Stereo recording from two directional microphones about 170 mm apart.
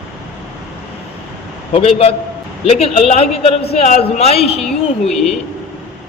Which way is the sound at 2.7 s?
35° left (ahead or behind).